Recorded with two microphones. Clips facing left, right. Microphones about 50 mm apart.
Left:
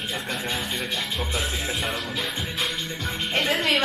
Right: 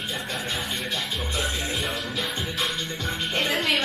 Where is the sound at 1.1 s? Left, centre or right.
Centre.